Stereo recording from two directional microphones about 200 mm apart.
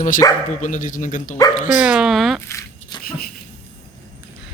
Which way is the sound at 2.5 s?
15° left (ahead or behind).